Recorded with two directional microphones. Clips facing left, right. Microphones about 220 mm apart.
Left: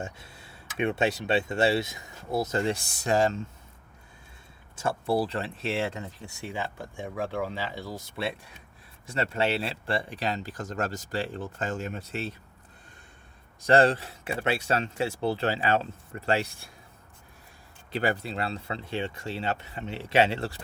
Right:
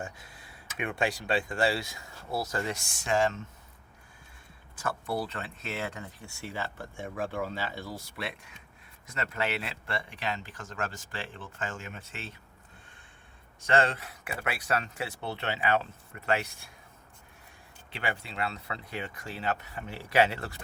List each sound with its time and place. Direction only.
0.0 s speech: 25° left (ahead or behind)
4.7 s speech: 25° left (ahead or behind)
13.6 s speech: 35° left (ahead or behind)
17.9 s speech: 40° left (ahead or behind)